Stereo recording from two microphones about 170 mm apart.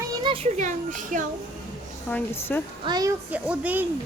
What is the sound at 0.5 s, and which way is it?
Speech, 50° right (ahead or behind).